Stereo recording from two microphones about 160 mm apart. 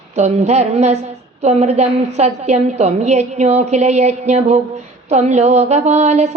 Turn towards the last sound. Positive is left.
turn(degrees=-45)  # may be behind; listen again after turning